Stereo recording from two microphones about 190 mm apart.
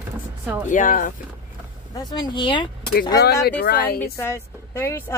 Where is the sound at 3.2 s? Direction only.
60° left (ahead or behind).